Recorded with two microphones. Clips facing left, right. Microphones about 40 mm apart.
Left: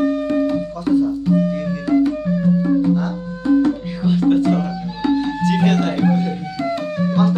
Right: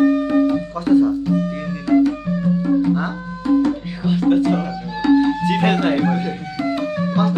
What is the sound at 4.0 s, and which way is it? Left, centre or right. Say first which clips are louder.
Music: even; centre.